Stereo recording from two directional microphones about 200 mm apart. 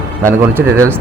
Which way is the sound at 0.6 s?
60° right (ahead or behind).